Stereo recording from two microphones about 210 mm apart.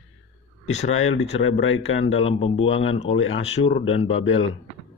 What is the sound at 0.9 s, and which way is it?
Speech, 75° left (ahead or behind).